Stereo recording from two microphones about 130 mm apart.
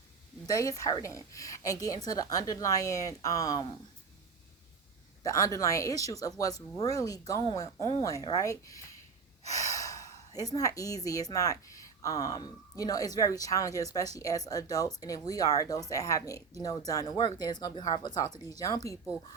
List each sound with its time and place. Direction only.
0.4 s speech: 25° left (ahead or behind)
5.2 s speech: 25° left (ahead or behind)